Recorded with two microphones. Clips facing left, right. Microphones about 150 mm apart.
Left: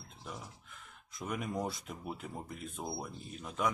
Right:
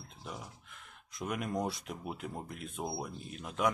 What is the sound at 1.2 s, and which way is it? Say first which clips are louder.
Speech: right 2 dB; centre (ahead or behind).